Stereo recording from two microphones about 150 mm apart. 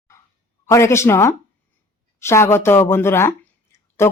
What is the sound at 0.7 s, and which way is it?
Speech, 20° left (ahead or behind).